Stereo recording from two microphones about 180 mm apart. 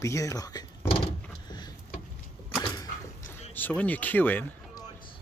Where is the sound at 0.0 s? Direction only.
15° left (ahead or behind).